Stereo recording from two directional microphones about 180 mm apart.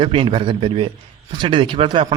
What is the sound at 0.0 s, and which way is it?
A man's voice, 30° right (ahead or behind).